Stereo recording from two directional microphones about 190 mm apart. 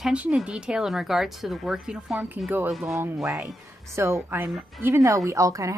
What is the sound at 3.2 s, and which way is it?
A woman's voice, 15° right (ahead or behind).